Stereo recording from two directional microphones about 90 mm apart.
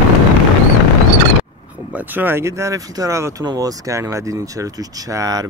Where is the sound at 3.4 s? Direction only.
50° right (ahead or behind).